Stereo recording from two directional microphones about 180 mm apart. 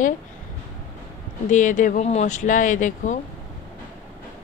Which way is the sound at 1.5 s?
45° left (ahead or behind).